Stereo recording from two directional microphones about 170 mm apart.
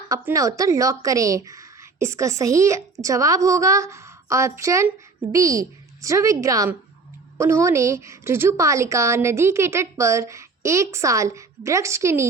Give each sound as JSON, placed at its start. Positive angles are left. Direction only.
{"t": 0.1, "sound": "speech", "side_deg": -20}